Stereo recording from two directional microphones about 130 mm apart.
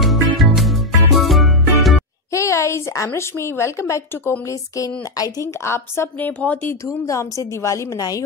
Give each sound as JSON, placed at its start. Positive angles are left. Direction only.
{"t": 0.0, "sound": "music", "side_deg": 0}
{"t": 2.3, "sound": "a woman's voice", "side_deg": 20}